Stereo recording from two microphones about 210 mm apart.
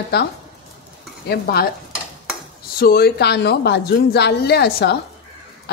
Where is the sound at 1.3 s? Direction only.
45° left (ahead or behind).